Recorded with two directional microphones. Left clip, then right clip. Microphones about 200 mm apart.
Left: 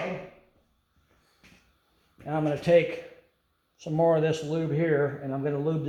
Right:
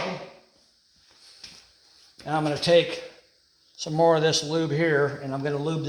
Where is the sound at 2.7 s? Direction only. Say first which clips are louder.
Right 2 dB; 35° right (ahead or behind).